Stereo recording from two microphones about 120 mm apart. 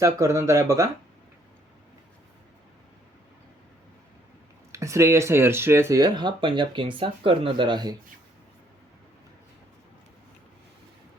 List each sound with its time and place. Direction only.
0.0 s speech: 25° right (ahead or behind)
4.7 s speech: 25° right (ahead or behind)